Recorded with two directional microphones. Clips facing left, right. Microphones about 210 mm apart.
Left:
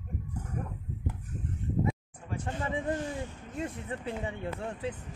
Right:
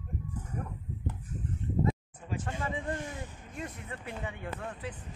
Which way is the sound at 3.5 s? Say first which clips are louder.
Left 5 dB; 25° left (ahead or behind).